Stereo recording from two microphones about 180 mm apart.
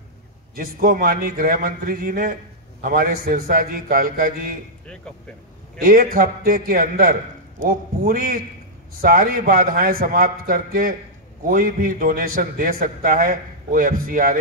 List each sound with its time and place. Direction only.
0.6 s a man's voice: 55° right (ahead or behind)
5.8 s a man's voice: 55° right (ahead or behind)